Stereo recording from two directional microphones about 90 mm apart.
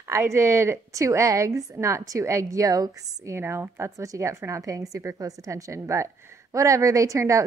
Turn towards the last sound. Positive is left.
turn(degrees=-35)  # may be behind; listen again after turning